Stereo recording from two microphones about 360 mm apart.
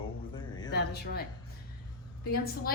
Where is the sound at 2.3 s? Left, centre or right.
Left.